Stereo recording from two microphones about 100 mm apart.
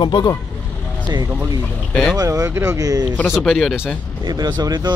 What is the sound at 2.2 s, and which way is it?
Speech, 30° right (ahead or behind).